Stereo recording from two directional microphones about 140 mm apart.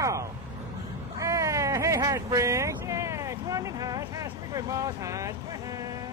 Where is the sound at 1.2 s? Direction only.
20° right (ahead or behind).